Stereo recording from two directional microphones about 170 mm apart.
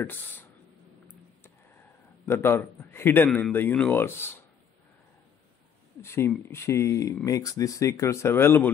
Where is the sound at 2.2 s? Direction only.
15° left (ahead or behind).